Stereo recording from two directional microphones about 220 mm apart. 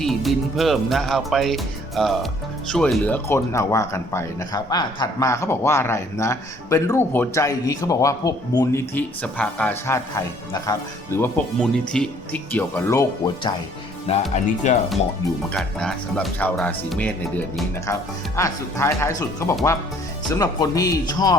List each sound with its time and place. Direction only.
0.0 s speech: centre (ahead or behind); by 13.5 s 15° left (ahead or behind)
14.1 s speech: 30° left (ahead or behind)
15.5 s speech: 5° left (ahead or behind)